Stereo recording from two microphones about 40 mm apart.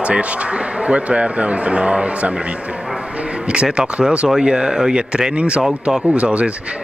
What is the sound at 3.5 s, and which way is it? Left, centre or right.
Speech, right.